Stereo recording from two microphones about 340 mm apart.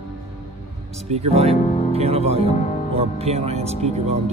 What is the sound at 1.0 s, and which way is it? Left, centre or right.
Speech, centre.